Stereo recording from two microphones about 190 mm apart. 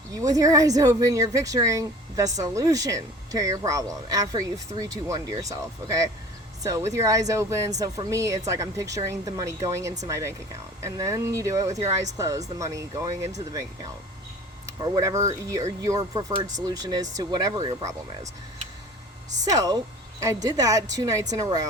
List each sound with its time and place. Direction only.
0.1 s speech: 20° right (ahead or behind)
19.5 s speech: 20° right (ahead or behind)